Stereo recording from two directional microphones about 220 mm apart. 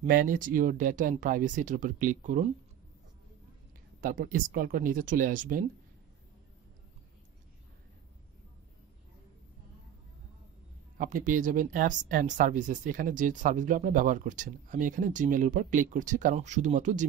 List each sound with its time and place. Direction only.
0.0 s speech: 40° right (ahead or behind)
4.0 s speech: 40° right (ahead or behind)
11.0 s speech: 35° right (ahead or behind)